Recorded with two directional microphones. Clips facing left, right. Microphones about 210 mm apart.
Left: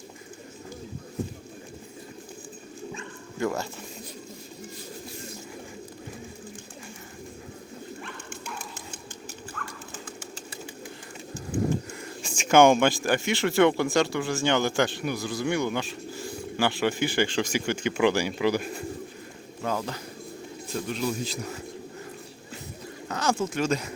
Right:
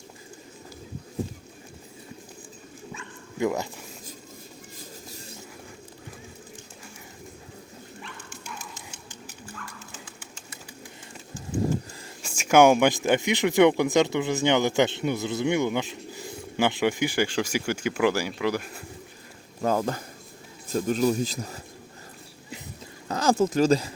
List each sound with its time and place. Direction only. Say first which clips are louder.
3.3 s speech: right 2 dB; 15° right (ahead or behind)
8.0 s bow-wow: left 3 dB; 55° left (ahead or behind)
9.6 s bird: left 4 dB; 55° left (ahead or behind)
12.2 s speech: right 1 dB; 10° right (ahead or behind)
19.6 s a man's voice: right 5 dB; 45° right (ahead or behind)
23.0 s speech: right 5 dB; 35° right (ahead or behind)